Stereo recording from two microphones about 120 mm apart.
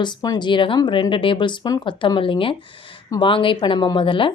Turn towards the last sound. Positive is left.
turn(degrees=45)  # may be behind; listen again after turning